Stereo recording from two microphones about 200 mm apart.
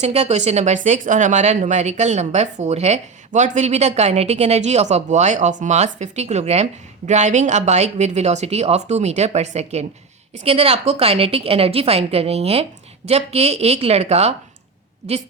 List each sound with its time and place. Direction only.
0.0 s a woman's voice: 35° right (ahead or behind)